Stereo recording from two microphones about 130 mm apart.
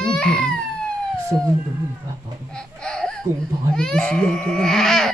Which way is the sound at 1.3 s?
25° right (ahead or behind).